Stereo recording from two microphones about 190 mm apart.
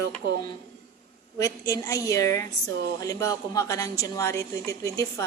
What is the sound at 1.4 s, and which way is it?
A woman's voice, 15° left (ahead or behind).